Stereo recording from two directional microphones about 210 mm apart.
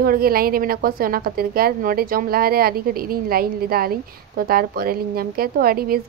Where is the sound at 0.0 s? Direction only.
45° right (ahead or behind).